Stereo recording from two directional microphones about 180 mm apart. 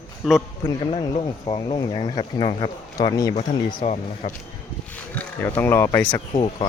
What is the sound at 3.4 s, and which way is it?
Speech, 40° left (ahead or behind).